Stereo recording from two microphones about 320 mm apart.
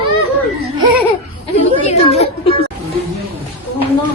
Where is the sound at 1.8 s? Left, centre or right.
Centre.